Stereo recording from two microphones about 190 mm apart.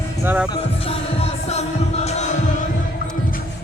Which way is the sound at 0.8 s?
30° left (ahead or behind).